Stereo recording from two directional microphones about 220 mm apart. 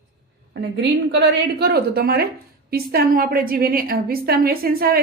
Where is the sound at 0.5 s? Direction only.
50° right (ahead or behind).